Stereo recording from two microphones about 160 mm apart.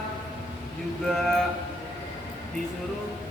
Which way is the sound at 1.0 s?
5° left (ahead or behind).